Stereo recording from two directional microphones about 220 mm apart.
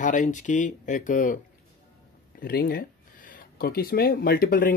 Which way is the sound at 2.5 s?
45° left (ahead or behind).